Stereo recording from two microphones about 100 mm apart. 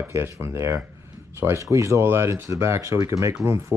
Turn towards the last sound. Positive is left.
turn(degrees=-25)  # may be behind; listen again after turning